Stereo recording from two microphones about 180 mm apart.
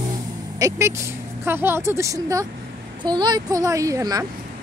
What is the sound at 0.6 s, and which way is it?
A woman's voice, 15° right (ahead or behind).